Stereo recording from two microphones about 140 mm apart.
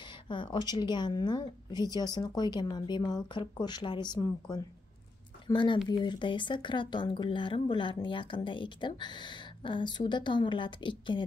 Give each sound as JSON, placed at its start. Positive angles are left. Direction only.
{"t": 0.0, "sound": "speech", "side_deg": 35}